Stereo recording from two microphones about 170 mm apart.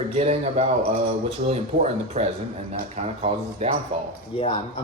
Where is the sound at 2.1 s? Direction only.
40° right (ahead or behind).